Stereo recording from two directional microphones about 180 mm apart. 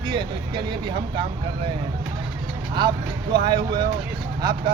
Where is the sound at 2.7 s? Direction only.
25° right (ahead or behind).